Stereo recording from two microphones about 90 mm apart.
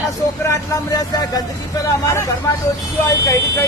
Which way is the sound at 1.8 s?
35° left (ahead or behind).